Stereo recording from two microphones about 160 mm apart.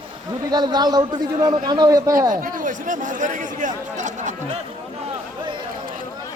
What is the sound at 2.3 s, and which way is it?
Speech, 55° right (ahead or behind).